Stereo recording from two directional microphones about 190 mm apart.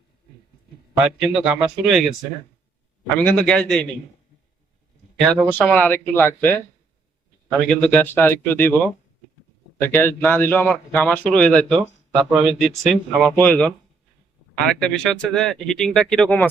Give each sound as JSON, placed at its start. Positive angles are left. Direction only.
{"t": 1.0, "sound": "speech", "side_deg": -5}
{"t": 3.2, "sound": "speech", "side_deg": 5}
{"t": 5.5, "sound": "a man's voice", "side_deg": 10}
{"t": 7.7, "sound": "a man's voice", "side_deg": 5}